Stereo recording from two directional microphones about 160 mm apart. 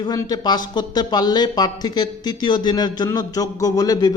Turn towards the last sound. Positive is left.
turn(degrees=25)  # may be behind; listen again after turning